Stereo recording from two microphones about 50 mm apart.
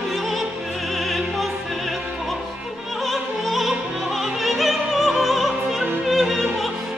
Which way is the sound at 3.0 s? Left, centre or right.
Centre.